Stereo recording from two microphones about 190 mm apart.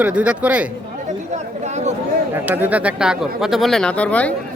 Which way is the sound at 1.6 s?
35° right (ahead or behind).